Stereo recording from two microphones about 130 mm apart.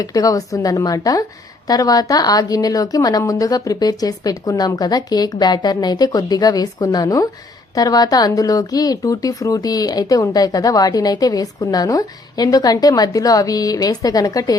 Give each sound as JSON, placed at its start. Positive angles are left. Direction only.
{"t": 0.0, "sound": "a woman's voice", "side_deg": 25}